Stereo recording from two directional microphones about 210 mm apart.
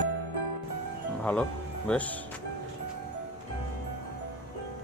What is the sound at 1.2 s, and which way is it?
Speech, 5° left (ahead or behind).